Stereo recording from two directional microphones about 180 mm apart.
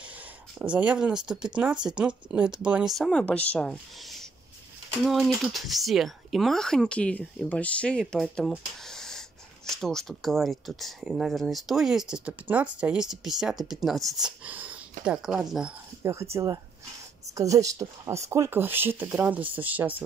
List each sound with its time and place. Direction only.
0.0 s speech: 5° right (ahead or behind)
16.0 s speech: 15° right (ahead or behind)